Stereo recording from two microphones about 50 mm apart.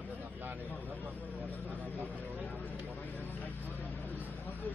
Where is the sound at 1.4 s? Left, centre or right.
Right.